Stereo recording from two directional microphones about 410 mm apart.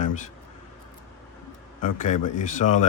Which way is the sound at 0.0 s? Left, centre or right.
Centre.